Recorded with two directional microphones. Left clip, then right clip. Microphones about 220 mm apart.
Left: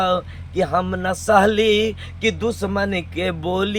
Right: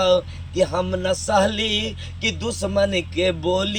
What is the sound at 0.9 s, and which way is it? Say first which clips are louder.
Speech: even; 30° left (ahead or behind).